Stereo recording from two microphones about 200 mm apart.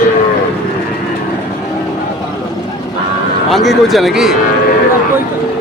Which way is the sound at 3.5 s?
Centre (ahead or behind).